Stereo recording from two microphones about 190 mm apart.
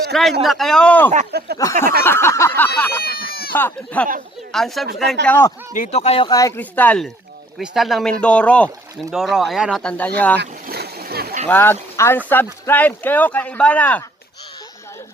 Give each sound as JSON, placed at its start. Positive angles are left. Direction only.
{"t": 0.1, "sound": "speech", "side_deg": 0}
{"t": 1.3, "sound": "a sound", "side_deg": -55}
{"t": 2.0, "sound": "speech", "side_deg": 15}
{"t": 3.0, "sound": "a sound", "side_deg": 55}
{"t": 3.5, "sound": "speech", "side_deg": 10}
{"t": 5.7, "sound": "speech", "side_deg": 40}
{"t": 10.4, "sound": "splash", "side_deg": -55}
{"t": 11.4, "sound": "speech", "side_deg": 10}